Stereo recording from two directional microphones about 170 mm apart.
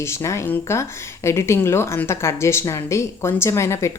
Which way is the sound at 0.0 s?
15° left (ahead or behind).